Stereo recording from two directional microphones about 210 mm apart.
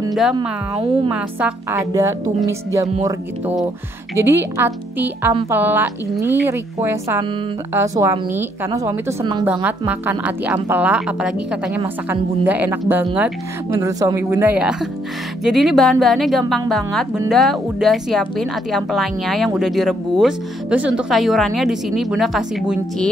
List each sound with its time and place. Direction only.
0.1 s speech: centre (ahead or behind)
0.4 s speech: 20° right (ahead or behind)
1.1 s a woman's voice: 5° right (ahead or behind)
1.9 s a woman's voice: 15° right (ahead or behind)
4.2 s a woman's voice: 10° right (ahead or behind)